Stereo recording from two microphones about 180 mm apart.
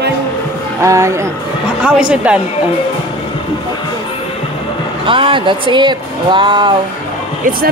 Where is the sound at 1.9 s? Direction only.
5° right (ahead or behind).